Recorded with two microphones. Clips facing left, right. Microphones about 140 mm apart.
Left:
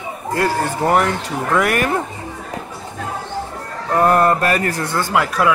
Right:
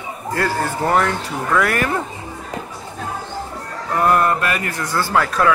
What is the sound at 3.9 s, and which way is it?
Mantra, 35° left (ahead or behind).